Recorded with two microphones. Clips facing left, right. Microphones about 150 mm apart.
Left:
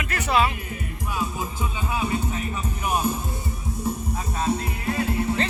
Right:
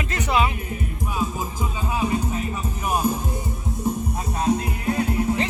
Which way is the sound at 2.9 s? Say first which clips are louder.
Right 2 dB; 10° right (ahead or behind).